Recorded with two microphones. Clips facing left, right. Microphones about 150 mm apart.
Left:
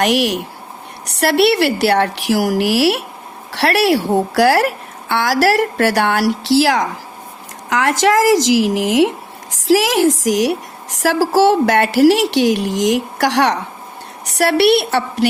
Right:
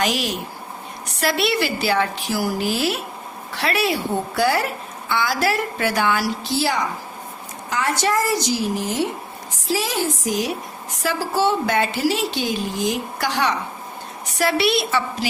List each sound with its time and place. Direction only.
0.0 s a woman's voice: 70° left (ahead or behind)